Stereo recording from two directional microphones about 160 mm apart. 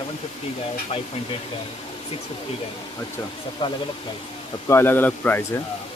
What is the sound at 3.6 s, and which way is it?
Speech, 30° left (ahead or behind).